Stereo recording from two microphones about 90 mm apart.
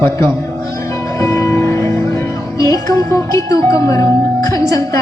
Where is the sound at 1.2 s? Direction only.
35° left (ahead or behind).